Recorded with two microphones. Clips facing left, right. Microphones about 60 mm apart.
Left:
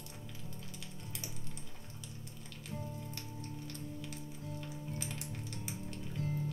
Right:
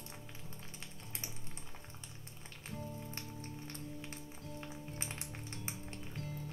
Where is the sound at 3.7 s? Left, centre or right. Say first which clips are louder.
Left 2 dB; right.